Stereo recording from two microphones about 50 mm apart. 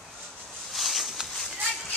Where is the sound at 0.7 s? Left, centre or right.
Centre.